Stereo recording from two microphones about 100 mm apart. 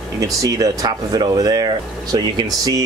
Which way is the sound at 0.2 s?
35° right (ahead or behind).